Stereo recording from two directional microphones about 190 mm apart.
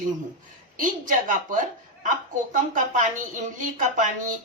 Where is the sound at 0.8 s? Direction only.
45° right (ahead or behind).